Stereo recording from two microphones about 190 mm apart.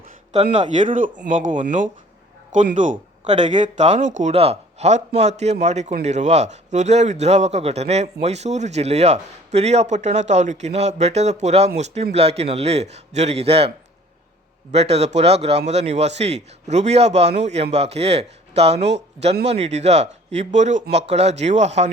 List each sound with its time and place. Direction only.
0.3 s speech: 40° right (ahead or behind)